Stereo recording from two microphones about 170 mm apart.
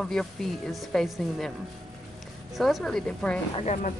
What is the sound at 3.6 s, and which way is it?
Speech, 45° left (ahead or behind).